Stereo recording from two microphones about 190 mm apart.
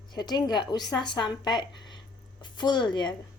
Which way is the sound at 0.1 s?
20° left (ahead or behind).